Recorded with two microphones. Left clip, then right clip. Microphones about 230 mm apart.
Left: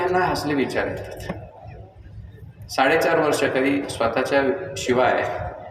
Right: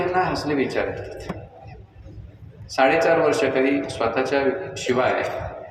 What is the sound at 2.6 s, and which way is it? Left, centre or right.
A man's voice, left.